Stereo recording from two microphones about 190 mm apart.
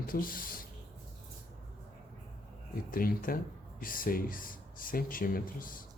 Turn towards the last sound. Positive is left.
turn(degrees=50)  # may be behind; listen again after turning